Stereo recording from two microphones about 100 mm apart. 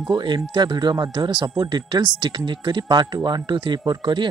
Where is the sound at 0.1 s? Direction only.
50° right (ahead or behind).